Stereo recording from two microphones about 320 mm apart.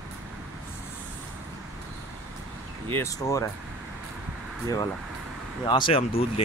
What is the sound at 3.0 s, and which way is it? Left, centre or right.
Speech, centre.